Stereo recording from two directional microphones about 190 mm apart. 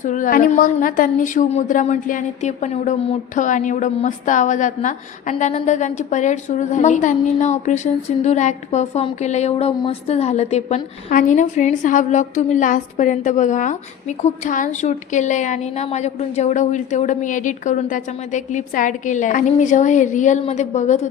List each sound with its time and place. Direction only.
0.0 s a woman's voice: 40° left (ahead or behind)